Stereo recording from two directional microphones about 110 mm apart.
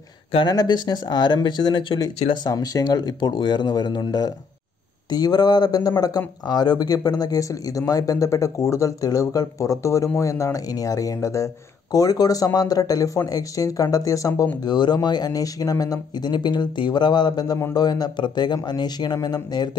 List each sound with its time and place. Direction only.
0.5 s speech: 35° left (ahead or behind)
2.4 s speech: 35° left (ahead or behind)